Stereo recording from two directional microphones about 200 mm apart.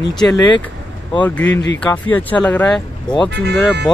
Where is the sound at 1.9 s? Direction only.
5° left (ahead or behind).